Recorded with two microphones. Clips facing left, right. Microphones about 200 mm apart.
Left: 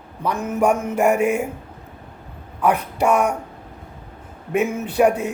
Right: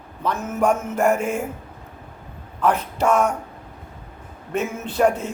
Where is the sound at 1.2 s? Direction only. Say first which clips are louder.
Left 5 dB; 65° left (ahead or behind).